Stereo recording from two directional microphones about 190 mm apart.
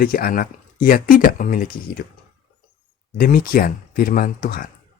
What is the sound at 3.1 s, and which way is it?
Speech, 50° left (ahead or behind).